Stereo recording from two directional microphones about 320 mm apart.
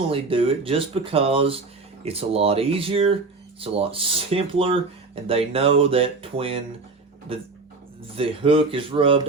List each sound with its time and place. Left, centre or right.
0.1 s speech: centre